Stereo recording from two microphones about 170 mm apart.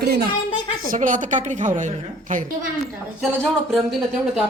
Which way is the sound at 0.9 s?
50° right (ahead or behind).